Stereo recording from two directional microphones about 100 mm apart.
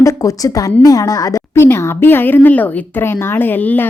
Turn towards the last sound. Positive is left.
turn(degrees=20)  # may be behind; listen again after turning